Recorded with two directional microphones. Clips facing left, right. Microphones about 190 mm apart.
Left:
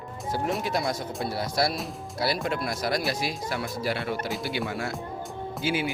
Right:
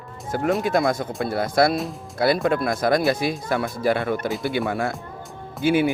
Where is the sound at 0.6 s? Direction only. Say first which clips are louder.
Right 7 dB; 50° right (ahead or behind).